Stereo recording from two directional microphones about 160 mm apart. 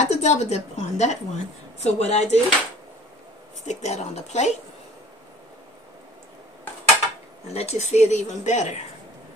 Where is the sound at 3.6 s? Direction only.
45° left (ahead or behind).